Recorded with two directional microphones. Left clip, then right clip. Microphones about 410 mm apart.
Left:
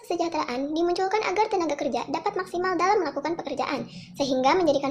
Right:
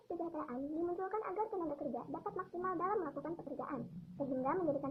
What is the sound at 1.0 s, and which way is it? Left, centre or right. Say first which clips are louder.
Speech: left 15 dB; centre.